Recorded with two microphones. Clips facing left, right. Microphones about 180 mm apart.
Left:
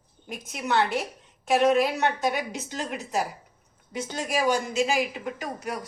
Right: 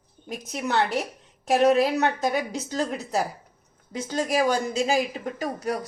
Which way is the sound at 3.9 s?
40° right (ahead or behind).